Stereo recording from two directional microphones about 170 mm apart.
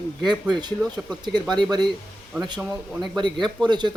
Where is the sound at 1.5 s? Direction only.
25° right (ahead or behind).